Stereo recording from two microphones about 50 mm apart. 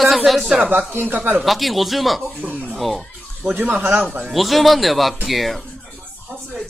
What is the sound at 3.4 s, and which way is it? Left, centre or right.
Speech, right.